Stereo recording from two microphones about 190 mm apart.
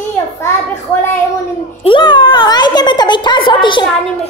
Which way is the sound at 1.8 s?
25° left (ahead or behind).